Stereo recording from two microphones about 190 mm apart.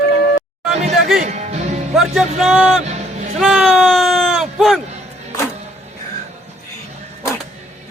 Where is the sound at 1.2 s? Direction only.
35° right (ahead or behind).